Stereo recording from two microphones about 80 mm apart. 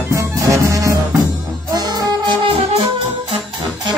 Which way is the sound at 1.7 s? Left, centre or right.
Right.